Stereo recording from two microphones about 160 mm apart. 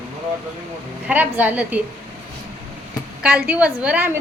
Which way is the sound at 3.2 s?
10° right (ahead or behind).